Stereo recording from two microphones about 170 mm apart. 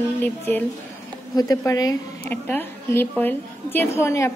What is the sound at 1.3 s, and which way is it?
A woman's voice, 20° left (ahead or behind).